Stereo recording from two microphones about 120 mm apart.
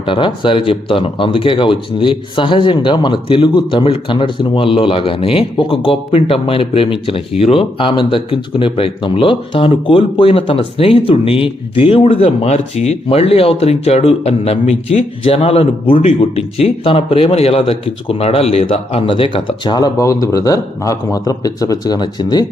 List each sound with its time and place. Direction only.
0.0 s speech: 45° left (ahead or behind)